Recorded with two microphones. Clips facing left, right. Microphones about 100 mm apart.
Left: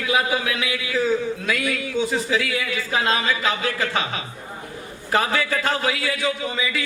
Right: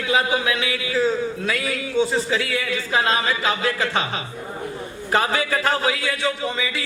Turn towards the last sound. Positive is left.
turn(degrees=-35)  # may be behind; listen again after turning